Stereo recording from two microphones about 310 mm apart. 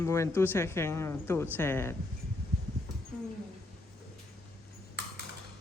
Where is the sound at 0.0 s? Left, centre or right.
Centre.